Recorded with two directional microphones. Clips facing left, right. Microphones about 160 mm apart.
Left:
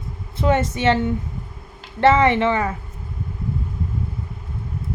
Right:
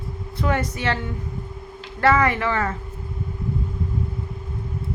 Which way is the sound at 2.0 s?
25° left (ahead or behind).